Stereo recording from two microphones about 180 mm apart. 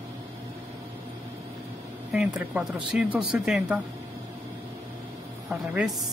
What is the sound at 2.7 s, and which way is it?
Speech, 5° right (ahead or behind).